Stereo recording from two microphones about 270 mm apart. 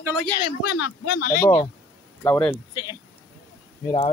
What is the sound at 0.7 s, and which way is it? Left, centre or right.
Speech, left.